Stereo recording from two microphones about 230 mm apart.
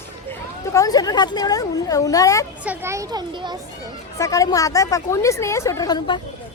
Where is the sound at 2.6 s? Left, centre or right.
Centre.